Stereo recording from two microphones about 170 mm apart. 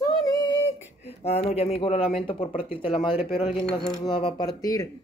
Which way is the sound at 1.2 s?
35° left (ahead or behind).